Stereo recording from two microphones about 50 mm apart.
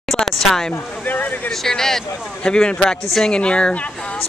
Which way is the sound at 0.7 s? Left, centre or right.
Left.